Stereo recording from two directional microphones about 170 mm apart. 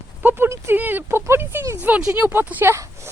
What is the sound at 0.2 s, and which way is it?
Speech, 10° right (ahead or behind).